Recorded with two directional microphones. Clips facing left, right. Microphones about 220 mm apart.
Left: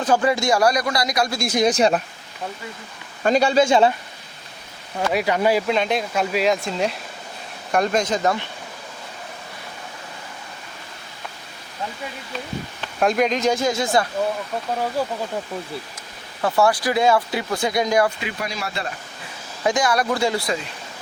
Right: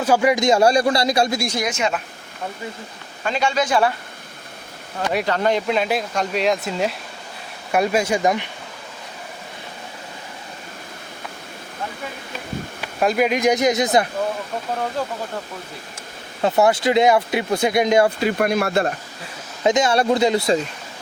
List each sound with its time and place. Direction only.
0.0 s speech: 10° right (ahead or behind); by 1.4 s 25° right (ahead or behind)
1.6 s speech: 35° left (ahead or behind)
3.2 s speech: 40° left (ahead or behind)
5.1 s speech: 10° left (ahead or behind); by 8.4 s 15° right (ahead or behind)
12.8 s speech: 5° right (ahead or behind); by 14.1 s 20° right (ahead or behind)
15.0 s speech: 10° left (ahead or behind)
16.4 s speech: 20° right (ahead or behind)
18.3 s speech: 55° right (ahead or behind)
19.6 s speech: 20° right (ahead or behind)